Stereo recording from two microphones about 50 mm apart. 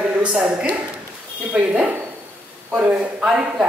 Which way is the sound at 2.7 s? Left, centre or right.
Right.